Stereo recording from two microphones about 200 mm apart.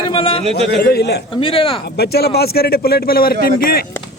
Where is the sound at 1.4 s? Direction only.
25° left (ahead or behind).